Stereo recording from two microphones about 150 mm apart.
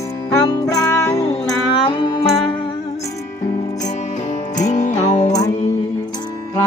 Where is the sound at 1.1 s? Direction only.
45° left (ahead or behind).